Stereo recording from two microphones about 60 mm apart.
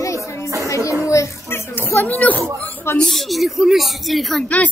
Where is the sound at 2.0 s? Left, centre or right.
Left.